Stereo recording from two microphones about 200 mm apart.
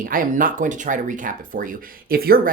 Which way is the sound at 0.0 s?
45° right (ahead or behind).